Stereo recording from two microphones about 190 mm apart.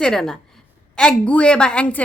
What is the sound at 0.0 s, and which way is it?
A woman's voice, 5° left (ahead or behind).